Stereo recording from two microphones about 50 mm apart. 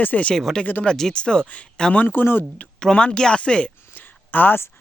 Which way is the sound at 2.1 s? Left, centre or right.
Left.